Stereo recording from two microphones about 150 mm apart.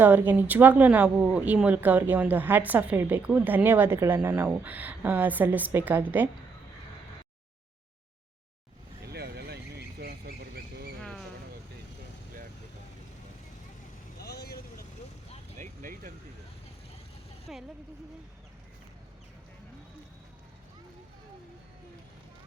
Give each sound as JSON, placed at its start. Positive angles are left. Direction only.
{"t": 0.0, "sound": "speech", "side_deg": -15}
{"t": 9.0, "sound": "duck", "side_deg": -90}
{"t": 14.2, "sound": "vehicle", "side_deg": 90}
{"t": 15.5, "sound": "vehicle", "side_deg": -60}
{"t": 17.5, "sound": "vehicle", "side_deg": 0}